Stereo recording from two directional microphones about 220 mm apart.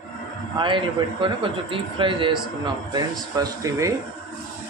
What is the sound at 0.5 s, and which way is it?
A man's voice, 20° right (ahead or behind).